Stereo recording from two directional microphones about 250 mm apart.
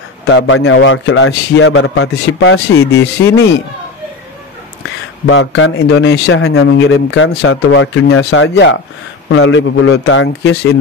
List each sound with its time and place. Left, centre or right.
0.3 s a man's voice: left
3.2 s speech: centre
5.3 s a man's voice: left